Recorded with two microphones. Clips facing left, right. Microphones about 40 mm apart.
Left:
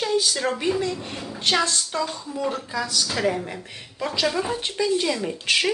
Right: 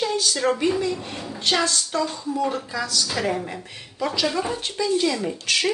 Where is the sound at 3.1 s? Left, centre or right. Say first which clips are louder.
Left 1 dB; centre.